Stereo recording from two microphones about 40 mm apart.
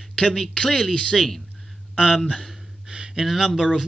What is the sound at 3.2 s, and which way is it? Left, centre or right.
Speech, centre.